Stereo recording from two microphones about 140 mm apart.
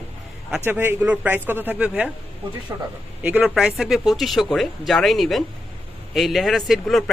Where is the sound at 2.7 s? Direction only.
25° right (ahead or behind).